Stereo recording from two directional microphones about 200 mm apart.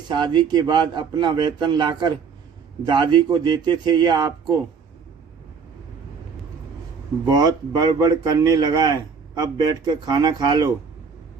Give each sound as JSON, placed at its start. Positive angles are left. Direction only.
{"t": 0.1, "sound": "a man's voice", "side_deg": -20}
{"t": 7.3, "sound": "a man's voice", "side_deg": -20}